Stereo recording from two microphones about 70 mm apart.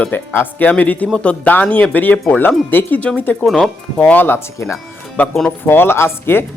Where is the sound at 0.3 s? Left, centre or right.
Left.